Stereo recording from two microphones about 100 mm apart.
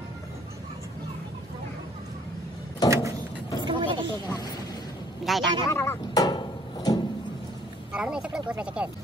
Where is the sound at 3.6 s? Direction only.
55° right (ahead or behind).